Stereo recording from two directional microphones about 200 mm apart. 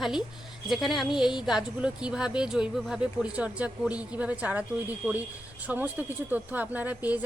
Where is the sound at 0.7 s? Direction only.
Centre (ahead or behind).